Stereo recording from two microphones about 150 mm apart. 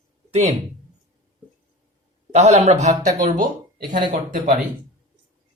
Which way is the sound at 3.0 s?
60° right (ahead or behind).